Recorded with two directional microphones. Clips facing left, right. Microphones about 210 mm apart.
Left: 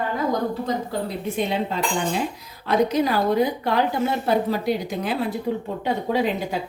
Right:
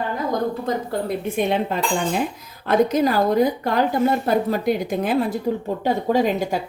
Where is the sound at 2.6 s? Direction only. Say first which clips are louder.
Right 2 dB; 45° right (ahead or behind).